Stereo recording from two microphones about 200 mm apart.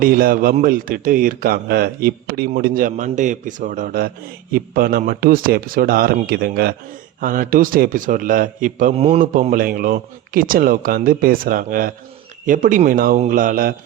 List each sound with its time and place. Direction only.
0.0 s a man's voice: 45° right (ahead or behind)